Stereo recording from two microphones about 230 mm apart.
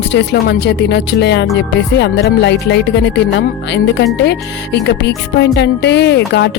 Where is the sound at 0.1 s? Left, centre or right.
Left.